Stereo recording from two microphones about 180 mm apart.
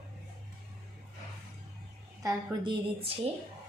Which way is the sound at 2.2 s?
20° right (ahead or behind).